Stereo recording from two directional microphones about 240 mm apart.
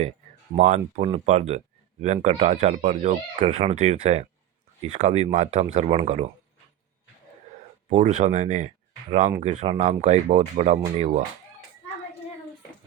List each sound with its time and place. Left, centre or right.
0.5 s speech: right
7.9 s speech: right